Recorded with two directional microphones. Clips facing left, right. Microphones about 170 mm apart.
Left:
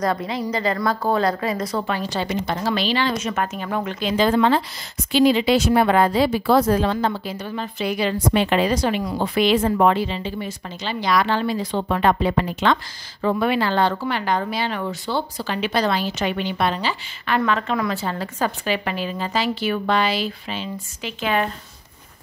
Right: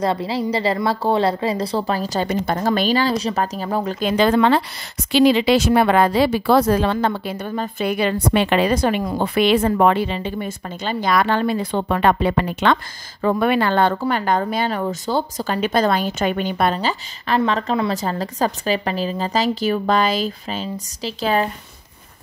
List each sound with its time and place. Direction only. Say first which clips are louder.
0.0 s a woman's voice: right 2 dB; 30° right (ahead or behind)
4.2 s speech: right 2 dB; 70° right (ahead or behind)
5.1 s speech: right 2 dB; 80° right; by 16.7 s 50° right (ahead or behind)
16.7 s a woman's voice: right 3 dB; 35° right (ahead or behind)